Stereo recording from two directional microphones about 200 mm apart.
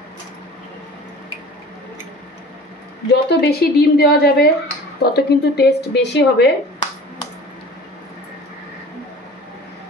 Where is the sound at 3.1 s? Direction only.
55° left (ahead or behind).